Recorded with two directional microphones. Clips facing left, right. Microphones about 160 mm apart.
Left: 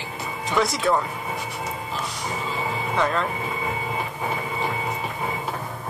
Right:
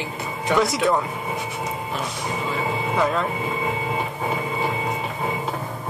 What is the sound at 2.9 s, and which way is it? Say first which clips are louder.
Speech: right 1 dB; 5° right (ahead or behind).